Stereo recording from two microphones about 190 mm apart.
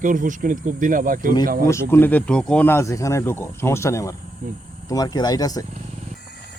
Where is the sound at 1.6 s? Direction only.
15° left (ahead or behind).